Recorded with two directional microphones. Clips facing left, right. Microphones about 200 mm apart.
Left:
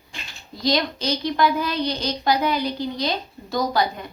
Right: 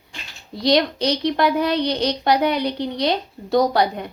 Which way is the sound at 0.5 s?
70° right (ahead or behind).